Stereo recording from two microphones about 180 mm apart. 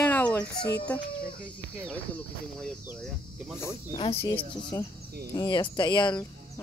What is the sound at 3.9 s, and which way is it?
Speech, 30° left (ahead or behind).